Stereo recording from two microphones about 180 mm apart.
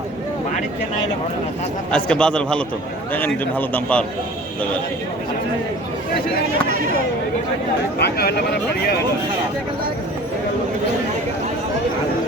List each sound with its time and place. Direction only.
2.0 s a man's voice: 5° left (ahead or behind)
7.9 s speech: 65° left (ahead or behind)